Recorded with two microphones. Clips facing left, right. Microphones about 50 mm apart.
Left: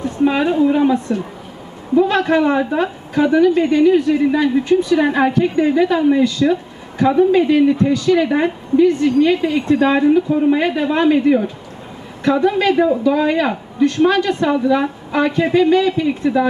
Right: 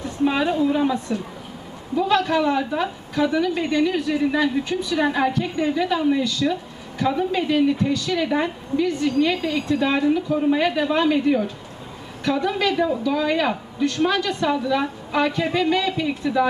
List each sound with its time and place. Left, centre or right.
0.0 s a woman's voice: left
7.8 s a woman's voice: left